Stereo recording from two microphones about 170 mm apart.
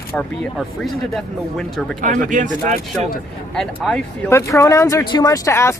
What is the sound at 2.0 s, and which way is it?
Speech, 50° right (ahead or behind).